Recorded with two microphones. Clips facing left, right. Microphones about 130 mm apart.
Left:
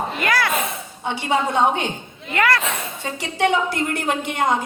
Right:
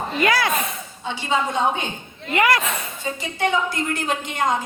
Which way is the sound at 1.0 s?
60° left (ahead or behind).